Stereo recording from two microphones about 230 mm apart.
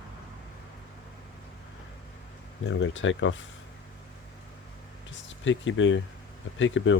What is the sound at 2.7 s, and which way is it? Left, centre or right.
Speech, left.